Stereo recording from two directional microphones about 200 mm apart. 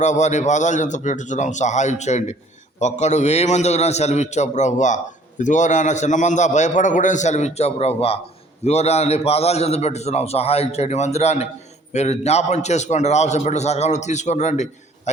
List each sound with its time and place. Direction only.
0.0 s a man's voice: 35° left (ahead or behind)